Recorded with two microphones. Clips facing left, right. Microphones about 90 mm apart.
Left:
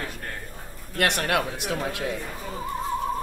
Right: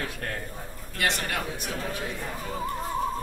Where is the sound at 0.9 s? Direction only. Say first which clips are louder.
Left 5 dB; 65° left (ahead or behind); by 2.0 s 85° left.